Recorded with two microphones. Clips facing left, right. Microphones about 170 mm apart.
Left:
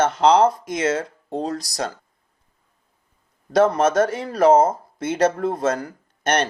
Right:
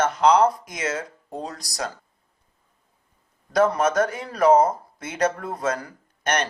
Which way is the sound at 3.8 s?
25° left (ahead or behind).